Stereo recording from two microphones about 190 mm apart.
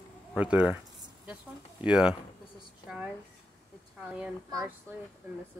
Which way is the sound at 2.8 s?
5° right (ahead or behind).